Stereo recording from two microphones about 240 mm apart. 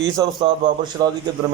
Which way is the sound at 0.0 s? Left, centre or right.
Centre.